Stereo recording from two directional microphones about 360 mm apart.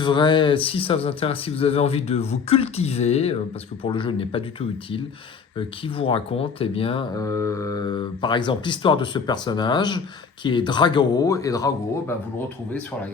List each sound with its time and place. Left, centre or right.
0.0 s speech: centre
5.5 s speech: centre